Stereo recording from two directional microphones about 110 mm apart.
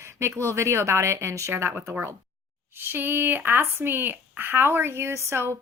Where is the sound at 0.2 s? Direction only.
25° right (ahead or behind).